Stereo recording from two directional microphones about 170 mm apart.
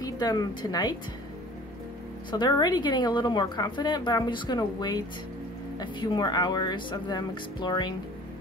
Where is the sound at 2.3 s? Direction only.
25° left (ahead or behind).